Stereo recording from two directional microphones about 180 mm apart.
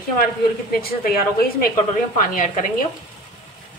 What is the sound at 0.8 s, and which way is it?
A woman's voice, 55° left (ahead or behind).